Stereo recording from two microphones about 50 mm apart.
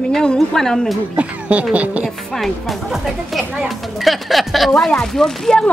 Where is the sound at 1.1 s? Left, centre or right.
Right.